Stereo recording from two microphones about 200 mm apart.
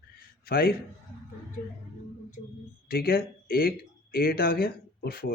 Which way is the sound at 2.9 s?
50° left (ahead or behind).